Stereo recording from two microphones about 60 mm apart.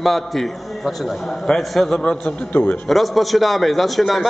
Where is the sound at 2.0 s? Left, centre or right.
Centre.